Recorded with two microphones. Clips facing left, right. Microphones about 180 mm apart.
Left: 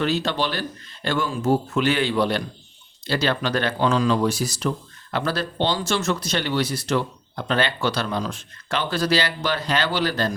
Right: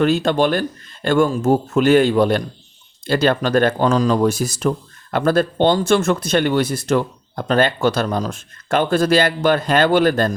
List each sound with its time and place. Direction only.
0.0 s speech: 50° right (ahead or behind)